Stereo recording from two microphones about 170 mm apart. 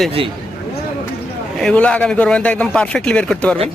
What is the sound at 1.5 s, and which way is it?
A man's voice, 5° left (ahead or behind).